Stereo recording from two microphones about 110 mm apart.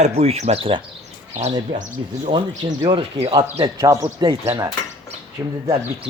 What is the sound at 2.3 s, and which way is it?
Speech, 45° right (ahead or behind).